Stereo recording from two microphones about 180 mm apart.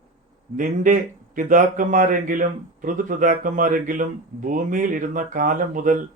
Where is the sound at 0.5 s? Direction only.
45° right (ahead or behind).